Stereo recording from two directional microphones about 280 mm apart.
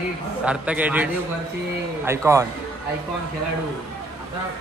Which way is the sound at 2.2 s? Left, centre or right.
Centre.